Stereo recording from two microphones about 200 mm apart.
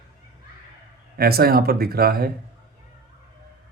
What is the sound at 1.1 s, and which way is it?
Speech, 50° right (ahead or behind).